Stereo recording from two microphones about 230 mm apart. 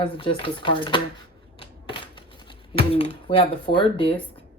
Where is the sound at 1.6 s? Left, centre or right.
Left.